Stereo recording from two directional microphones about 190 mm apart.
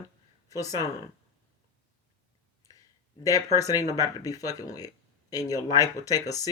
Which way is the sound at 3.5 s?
20° left (ahead or behind).